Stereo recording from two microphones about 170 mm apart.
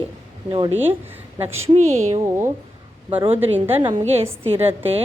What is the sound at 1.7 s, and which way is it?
Speech, 40° right (ahead or behind).